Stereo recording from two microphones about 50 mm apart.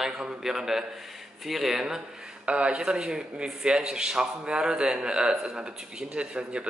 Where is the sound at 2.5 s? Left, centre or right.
Right.